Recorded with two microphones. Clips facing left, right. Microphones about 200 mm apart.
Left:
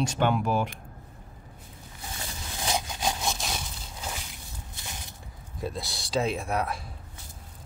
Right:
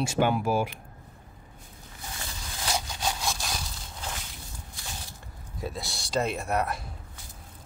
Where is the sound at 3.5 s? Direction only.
5° left (ahead or behind).